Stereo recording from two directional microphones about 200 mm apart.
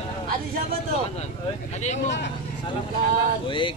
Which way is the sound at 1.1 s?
35° left (ahead or behind).